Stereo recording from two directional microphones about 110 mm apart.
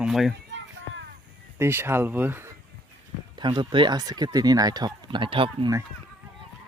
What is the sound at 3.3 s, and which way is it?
Speech, 45° right (ahead or behind).